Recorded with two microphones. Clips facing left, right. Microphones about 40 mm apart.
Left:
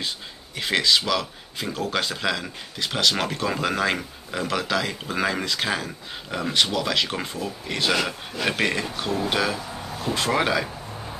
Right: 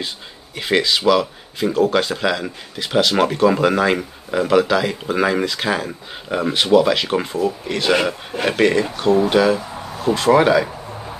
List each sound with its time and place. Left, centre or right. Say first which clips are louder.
0.6 s speech: right 3 dB; centre
6.2 s speech: right 4 dB; centre
7.9 s speech: right 7 dB; right
8.5 s speech: right 8 dB; centre